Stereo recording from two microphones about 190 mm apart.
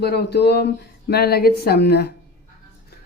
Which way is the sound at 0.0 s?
60° left (ahead or behind).